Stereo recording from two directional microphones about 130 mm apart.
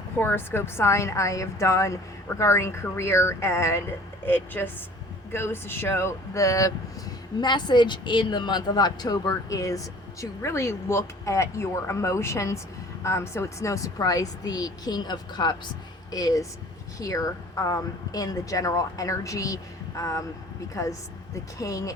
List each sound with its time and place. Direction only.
0.2 s a woman's voice: 15° left (ahead or behind)
21.6 s a woman's voice: 25° left (ahead or behind)